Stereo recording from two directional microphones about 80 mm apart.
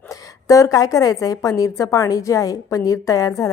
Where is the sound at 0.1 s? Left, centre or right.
Left.